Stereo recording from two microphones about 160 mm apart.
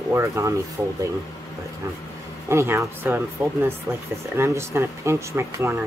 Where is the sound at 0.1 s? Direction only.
20° right (ahead or behind).